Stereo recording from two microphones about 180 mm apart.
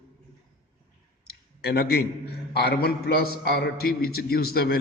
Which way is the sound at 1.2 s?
60° left (ahead or behind).